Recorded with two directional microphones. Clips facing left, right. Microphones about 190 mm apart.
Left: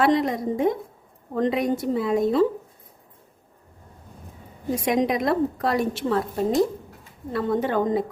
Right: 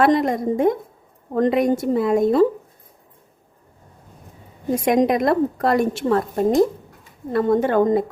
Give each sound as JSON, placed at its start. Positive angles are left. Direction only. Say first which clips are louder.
{"t": 0.0, "sound": "a woman's voice", "louder": "right 3 dB", "side_deg": -50}
{"t": 4.7, "sound": "a woman's voice", "louder": "right 5 dB", "side_deg": -50}